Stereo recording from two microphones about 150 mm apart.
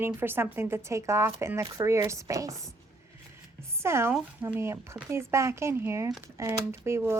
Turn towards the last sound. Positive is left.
turn(degrees=-15)  # may be behind; listen again after turning